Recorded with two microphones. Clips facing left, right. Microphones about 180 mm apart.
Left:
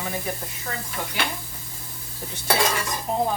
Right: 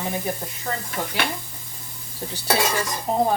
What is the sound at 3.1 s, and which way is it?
Speech, 35° right (ahead or behind).